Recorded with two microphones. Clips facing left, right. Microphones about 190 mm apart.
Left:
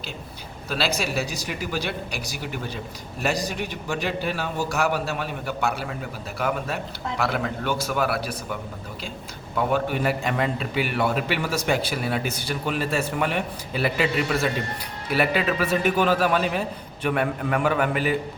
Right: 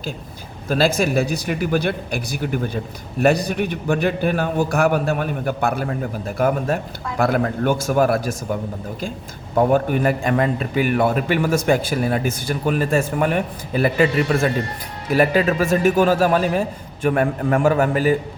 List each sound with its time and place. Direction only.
0.7 s a man's voice: 50° right (ahead or behind)
9.6 s a man's voice: 45° right (ahead or behind)